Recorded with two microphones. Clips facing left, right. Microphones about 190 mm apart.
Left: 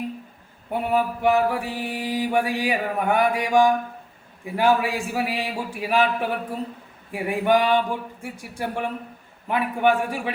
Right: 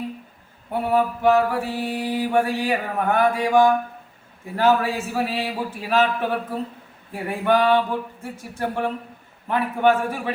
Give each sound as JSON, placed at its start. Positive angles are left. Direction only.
{"t": 0.7, "sound": "mantra", "side_deg": 15}